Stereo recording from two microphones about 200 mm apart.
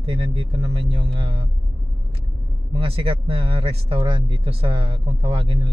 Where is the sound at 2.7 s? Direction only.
30° right (ahead or behind).